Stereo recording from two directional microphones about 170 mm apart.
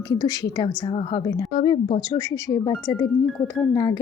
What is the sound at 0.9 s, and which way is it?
A woman's voice, 35° left (ahead or behind).